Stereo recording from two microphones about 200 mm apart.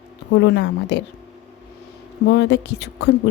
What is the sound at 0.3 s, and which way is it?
Speech, 60° left (ahead or behind).